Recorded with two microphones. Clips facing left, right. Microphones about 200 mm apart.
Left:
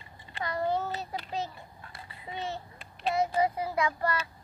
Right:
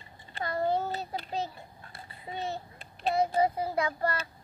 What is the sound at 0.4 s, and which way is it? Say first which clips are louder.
Child singing: right 1 dB; 30° right (ahead or behind).